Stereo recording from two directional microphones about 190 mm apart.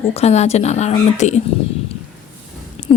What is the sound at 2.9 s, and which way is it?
Speech, 5° left (ahead or behind).